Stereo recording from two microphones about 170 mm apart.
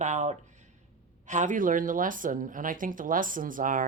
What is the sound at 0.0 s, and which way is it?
Speech, 45° right (ahead or behind).